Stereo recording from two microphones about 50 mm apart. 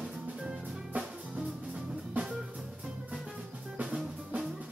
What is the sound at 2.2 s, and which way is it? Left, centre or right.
Music, right.